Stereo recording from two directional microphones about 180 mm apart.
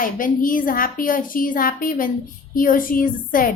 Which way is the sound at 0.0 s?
50° left (ahead or behind).